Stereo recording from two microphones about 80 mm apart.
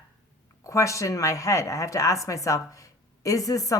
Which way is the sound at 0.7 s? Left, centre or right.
Left.